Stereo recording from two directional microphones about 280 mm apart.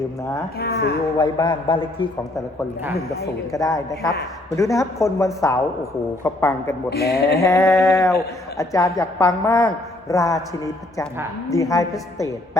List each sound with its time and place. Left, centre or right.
0.6 s speech: left
1.2 s a woman's voice: centre
3.5 s a woman's voice: centre
6.9 s speech: left
7.4 s a woman's voice: centre